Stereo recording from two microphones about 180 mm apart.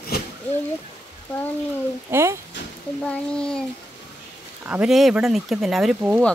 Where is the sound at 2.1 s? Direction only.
15° right (ahead or behind).